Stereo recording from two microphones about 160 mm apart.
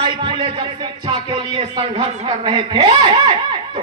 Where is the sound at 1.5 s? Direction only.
35° right (ahead or behind).